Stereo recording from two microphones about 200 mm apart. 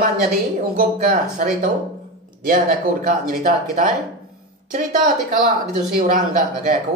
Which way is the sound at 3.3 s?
45° right (ahead or behind).